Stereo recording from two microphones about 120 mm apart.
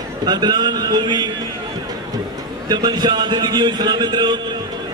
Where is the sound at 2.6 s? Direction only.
35° right (ahead or behind).